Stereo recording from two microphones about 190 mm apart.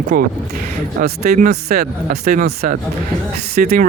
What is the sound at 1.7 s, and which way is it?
Speech, 55° right (ahead or behind).